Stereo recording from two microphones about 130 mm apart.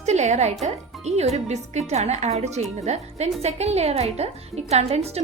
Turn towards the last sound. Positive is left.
turn(degrees=-55)  # may be behind; listen again after turning